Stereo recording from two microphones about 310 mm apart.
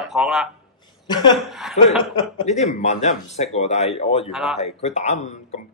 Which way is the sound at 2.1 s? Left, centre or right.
Left.